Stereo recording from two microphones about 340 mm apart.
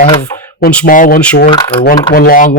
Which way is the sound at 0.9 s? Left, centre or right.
Left.